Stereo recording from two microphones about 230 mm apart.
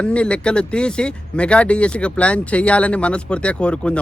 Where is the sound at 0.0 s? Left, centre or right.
Centre.